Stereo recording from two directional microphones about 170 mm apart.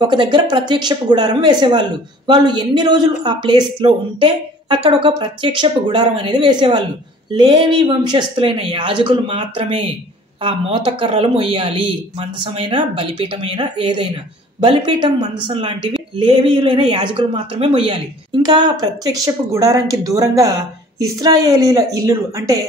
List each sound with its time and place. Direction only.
0.0 s speech: 30° right (ahead or behind)